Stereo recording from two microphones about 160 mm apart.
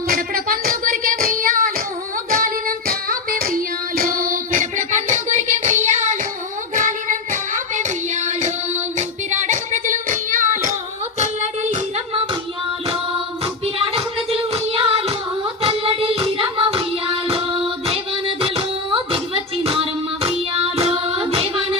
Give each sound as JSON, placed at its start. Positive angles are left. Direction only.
{"t": 0.1, "sound": "child singing", "side_deg": -65}
{"t": 2.3, "sound": "female singing", "side_deg": -60}
{"t": 6.7, "sound": "singing", "side_deg": -55}
{"t": 11.2, "sound": "female singing", "side_deg": -45}
{"t": 13.4, "sound": "music", "side_deg": -35}
{"t": 15.6, "sound": "child singing", "side_deg": -35}